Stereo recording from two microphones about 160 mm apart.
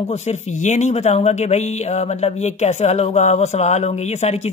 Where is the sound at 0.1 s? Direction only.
45° left (ahead or behind).